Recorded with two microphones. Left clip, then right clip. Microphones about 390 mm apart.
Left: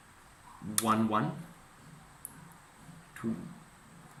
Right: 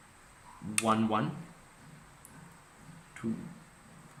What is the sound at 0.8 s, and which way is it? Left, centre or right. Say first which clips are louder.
Speech: even; centre.